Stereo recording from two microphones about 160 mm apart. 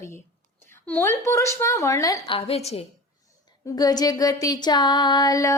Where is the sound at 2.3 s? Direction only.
40° left (ahead or behind).